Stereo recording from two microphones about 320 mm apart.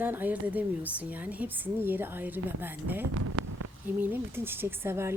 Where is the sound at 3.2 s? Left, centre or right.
Right.